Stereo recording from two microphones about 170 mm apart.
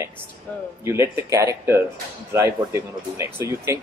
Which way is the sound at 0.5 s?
10° left (ahead or behind).